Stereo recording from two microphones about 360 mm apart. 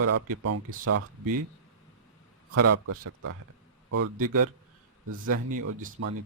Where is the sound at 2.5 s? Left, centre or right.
Right.